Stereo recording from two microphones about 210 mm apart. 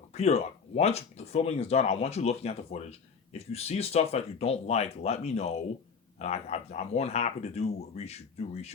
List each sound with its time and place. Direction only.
0.1 s speech: 30° left (ahead or behind)